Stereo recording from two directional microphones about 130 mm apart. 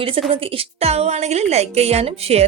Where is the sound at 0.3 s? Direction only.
45° right (ahead or behind).